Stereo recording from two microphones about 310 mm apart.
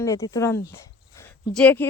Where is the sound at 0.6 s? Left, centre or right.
Centre.